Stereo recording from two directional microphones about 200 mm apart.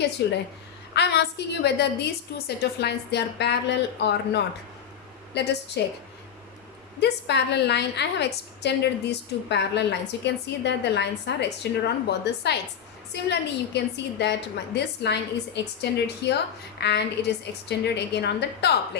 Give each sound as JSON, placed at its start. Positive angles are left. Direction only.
{"t": 0.2, "sound": "a woman's voice", "side_deg": 55}
{"t": 7.0, "sound": "a woman's voice", "side_deg": 55}